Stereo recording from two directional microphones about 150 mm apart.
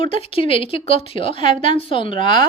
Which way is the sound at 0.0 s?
35° left (ahead or behind).